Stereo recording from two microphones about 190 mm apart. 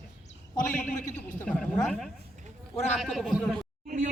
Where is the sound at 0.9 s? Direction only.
40° left (ahead or behind).